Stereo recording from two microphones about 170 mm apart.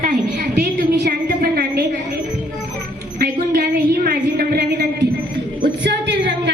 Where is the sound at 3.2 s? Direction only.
60° right (ahead or behind).